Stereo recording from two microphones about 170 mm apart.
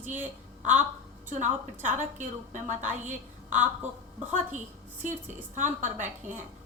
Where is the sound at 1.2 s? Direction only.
45° right (ahead or behind).